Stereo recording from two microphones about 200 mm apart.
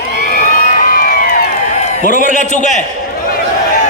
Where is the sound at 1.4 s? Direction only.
35° left (ahead or behind).